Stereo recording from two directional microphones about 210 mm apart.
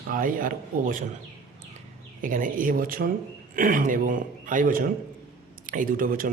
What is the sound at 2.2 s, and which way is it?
Speech, 40° right (ahead or behind).